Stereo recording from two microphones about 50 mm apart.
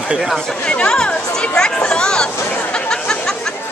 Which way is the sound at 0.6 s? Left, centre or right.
Left.